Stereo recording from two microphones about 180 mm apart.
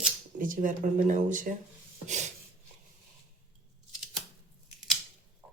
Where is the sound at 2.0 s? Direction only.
40° right (ahead or behind).